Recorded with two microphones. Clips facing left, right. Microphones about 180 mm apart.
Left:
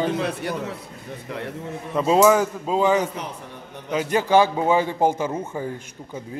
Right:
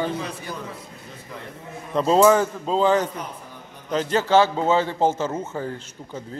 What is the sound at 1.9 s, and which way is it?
A man's voice, 5° left (ahead or behind).